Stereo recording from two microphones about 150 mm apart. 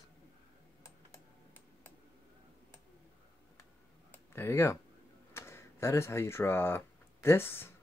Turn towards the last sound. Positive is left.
turn(degrees=15)  # may be behind; listen again after turning